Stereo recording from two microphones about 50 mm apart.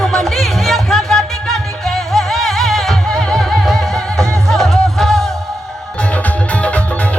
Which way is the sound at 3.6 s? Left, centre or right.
Centre.